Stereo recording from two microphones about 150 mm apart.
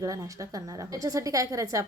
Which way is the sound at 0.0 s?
20° right (ahead or behind).